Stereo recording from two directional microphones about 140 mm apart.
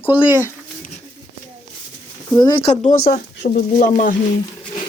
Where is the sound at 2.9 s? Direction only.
70° left (ahead or behind).